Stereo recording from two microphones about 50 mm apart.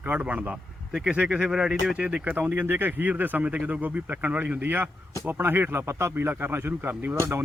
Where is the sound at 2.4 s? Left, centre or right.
Right.